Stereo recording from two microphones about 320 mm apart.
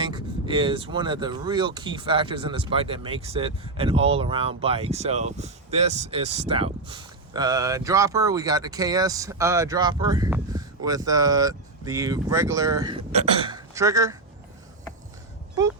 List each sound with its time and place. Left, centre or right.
0.0 s speech: centre